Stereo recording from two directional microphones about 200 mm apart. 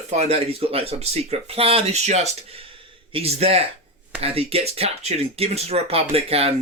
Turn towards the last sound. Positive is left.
turn(degrees=-30)  # may be behind; listen again after turning